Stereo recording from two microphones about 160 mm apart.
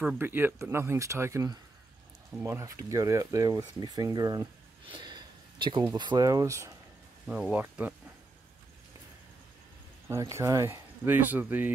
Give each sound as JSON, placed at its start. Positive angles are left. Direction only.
{"t": 0.2, "sound": "speech", "side_deg": -15}
{"t": 7.2, "sound": "speech", "side_deg": -5}
{"t": 10.0, "sound": "speech", "side_deg": -20}